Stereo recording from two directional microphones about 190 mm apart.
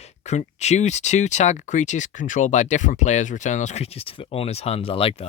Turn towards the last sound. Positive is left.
turn(degrees=30)  # may be behind; listen again after turning